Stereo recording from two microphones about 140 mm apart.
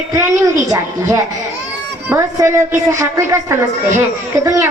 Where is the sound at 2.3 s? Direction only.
20° right (ahead or behind).